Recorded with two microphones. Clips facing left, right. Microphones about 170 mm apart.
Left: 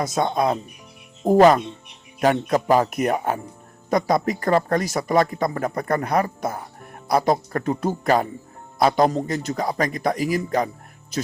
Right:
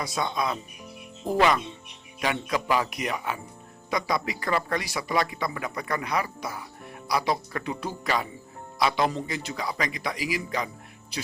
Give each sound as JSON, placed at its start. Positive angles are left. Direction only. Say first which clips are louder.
{"t": 0.0, "sound": "speech", "louder": "left 7 dB", "side_deg": 45}